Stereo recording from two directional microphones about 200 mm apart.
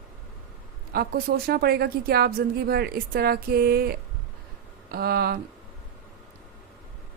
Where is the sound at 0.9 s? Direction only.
50° right (ahead or behind).